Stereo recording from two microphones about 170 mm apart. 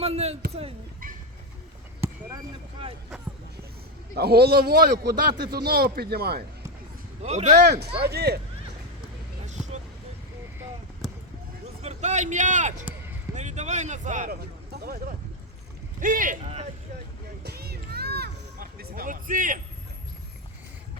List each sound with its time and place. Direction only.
0.0 s a man's voice: 35° right (ahead or behind)
4.1 s a man's voice: 70° right (ahead or behind)
7.2 s a man's voice: 40° right (ahead or behind)
7.6 s a man's voice: 75° right (ahead or behind)
11.8 s speech: 40° right (ahead or behind)
14.3 s a sound: 65° right (ahead or behind)
16.0 s speech: 50° right (ahead or behind)
16.4 s a man's voice: 35° right (ahead or behind)
17.4 s music: 65° right (ahead or behind); by 19.5 s 50° right (ahead or behind)